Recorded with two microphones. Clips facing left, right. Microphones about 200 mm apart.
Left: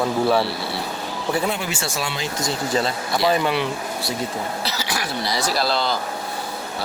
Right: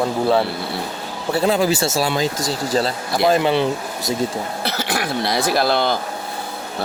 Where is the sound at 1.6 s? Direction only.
35° right (ahead or behind).